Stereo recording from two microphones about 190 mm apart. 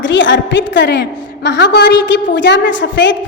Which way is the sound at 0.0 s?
75° left (ahead or behind).